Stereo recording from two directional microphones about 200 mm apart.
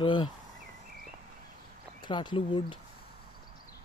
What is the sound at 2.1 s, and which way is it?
Speech, 25° left (ahead or behind).